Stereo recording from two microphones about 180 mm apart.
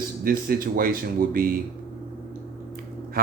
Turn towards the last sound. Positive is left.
turn(degrees=-55)  # may be behind; listen again after turning